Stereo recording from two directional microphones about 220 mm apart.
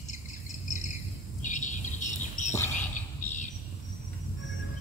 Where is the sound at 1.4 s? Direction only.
35° left (ahead or behind).